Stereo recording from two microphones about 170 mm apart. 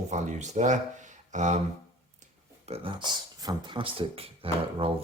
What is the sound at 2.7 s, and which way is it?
Speech, 30° right (ahead or behind).